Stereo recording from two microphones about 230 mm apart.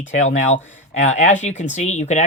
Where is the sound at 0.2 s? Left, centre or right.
Left.